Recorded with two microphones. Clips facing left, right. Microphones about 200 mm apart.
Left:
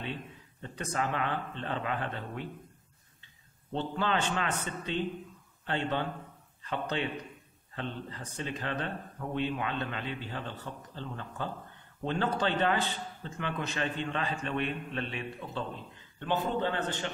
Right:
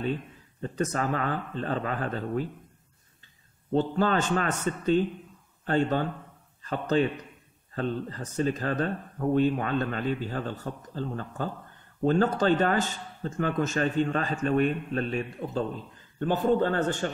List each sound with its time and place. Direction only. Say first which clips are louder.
0.0 s a sound: right 8 dB; 40° right (ahead or behind)
0.9 s speech: right 4 dB; 40° right (ahead or behind)
3.7 s a man's voice: right 7 dB; 45° right (ahead or behind)